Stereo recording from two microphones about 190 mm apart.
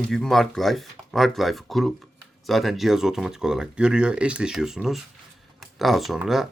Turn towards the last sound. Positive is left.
turn(degrees=-5)  # may be behind; listen again after turning